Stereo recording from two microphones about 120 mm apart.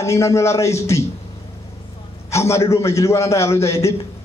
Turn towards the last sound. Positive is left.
turn(degrees=25)  # may be behind; listen again after turning